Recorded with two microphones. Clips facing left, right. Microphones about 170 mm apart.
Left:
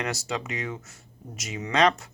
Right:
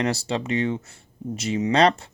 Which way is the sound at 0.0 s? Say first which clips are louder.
Right 6 dB; 30° right (ahead or behind).